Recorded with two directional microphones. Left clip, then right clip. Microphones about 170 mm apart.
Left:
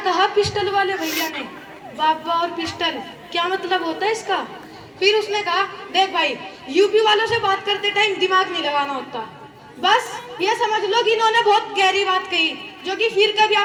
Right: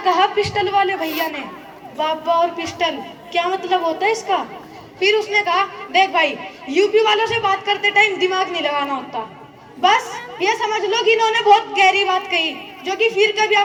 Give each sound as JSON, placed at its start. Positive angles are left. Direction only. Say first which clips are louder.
{"t": 0.0, "sound": "a woman's voice", "louder": "right 2 dB", "side_deg": -20}